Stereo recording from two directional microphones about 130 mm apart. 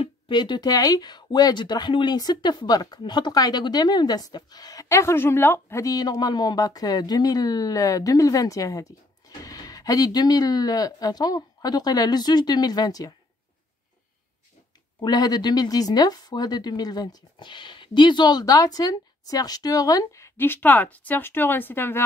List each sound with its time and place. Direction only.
0.0 s speech: 35° left (ahead or behind)
15.0 s speech: 30° left (ahead or behind)